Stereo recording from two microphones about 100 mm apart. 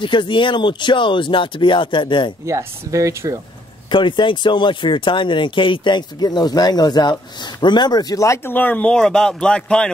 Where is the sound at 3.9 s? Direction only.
55° left (ahead or behind); by 8.4 s 35° left (ahead or behind).